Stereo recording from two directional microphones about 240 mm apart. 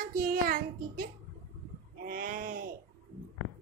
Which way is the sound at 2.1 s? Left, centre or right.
Right.